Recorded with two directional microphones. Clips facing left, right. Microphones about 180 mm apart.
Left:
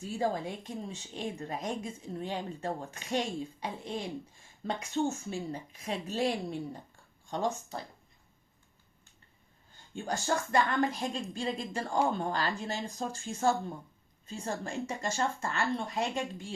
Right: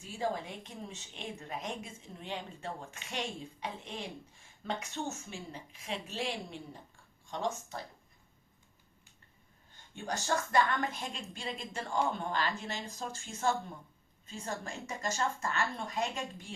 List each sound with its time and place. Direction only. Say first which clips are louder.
0.2 s a woman's voice: left 3 dB; 35° left (ahead or behind)
9.9 s a woman's voice: left 2 dB; 30° left (ahead or behind)